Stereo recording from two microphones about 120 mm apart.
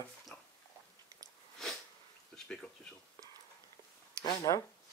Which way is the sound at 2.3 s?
5° left (ahead or behind).